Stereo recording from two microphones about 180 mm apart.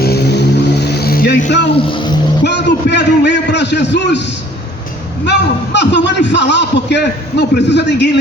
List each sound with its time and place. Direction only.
0.0 s vehicle: 60° left (ahead or behind)
1.9 s speech: 25° left (ahead or behind)
2.4 s a man's voice: 70° left (ahead or behind)
5.2 s a man's voice: 70° left (ahead or behind)